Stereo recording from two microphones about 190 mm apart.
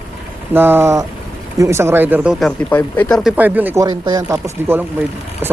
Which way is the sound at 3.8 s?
20° right (ahead or behind).